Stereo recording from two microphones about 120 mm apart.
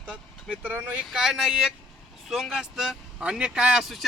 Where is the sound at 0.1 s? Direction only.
10° right (ahead or behind).